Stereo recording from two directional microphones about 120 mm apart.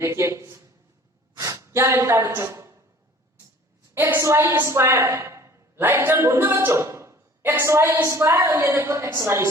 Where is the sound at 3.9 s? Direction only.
20° right (ahead or behind).